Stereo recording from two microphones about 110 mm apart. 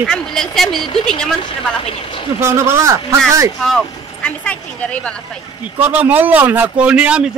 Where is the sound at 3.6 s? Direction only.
5° left (ahead or behind).